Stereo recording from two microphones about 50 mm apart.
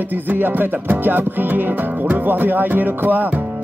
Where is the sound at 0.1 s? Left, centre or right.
Right.